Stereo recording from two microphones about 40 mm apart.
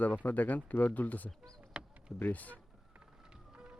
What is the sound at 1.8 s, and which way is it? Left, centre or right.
Power windows, right.